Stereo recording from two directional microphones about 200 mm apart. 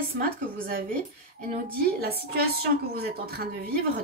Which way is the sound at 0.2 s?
45° right (ahead or behind).